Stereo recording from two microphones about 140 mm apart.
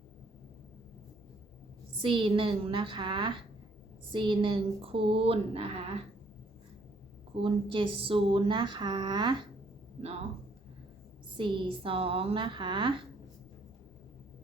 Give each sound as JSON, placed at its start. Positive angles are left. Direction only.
{"t": 2.0, "sound": "speech", "side_deg": -40}
{"t": 7.3, "sound": "speech", "side_deg": -40}
{"t": 11.3, "sound": "speech", "side_deg": -35}